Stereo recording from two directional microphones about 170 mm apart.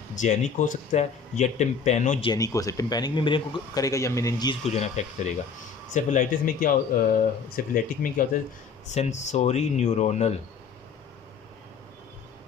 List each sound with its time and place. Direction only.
0.1 s speech: 45° left (ahead or behind)
2.3 s a man's voice: 20° left (ahead or behind)
4.6 s speech: 40° left (ahead or behind)
8.8 s speech: 40° left (ahead or behind)